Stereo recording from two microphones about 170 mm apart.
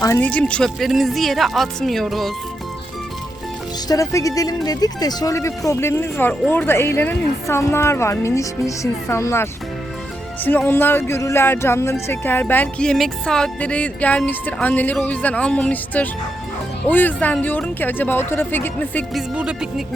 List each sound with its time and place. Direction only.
0.0 s speech: 15° left (ahead or behind)
3.8 s speech: 20° left (ahead or behind)
19.3 s speech: 5° right (ahead or behind)